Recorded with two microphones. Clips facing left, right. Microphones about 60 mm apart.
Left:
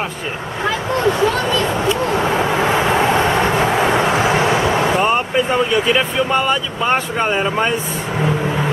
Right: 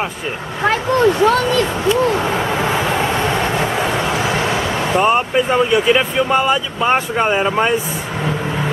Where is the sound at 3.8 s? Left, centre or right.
Left.